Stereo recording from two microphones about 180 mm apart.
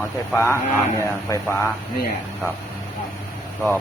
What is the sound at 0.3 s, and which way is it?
Speech, 15° left (ahead or behind).